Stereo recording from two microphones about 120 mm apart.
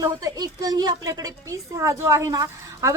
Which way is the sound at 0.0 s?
30° right (ahead or behind).